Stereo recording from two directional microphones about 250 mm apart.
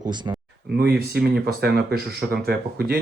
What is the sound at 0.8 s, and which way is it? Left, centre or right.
Speech, right.